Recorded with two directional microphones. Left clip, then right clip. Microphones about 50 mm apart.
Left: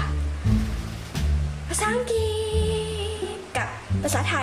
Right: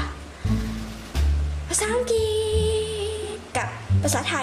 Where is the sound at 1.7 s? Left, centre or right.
Right.